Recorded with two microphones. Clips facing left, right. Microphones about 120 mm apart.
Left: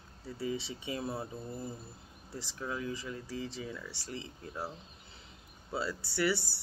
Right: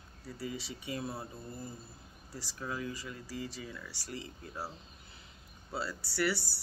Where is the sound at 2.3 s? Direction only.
20° left (ahead or behind).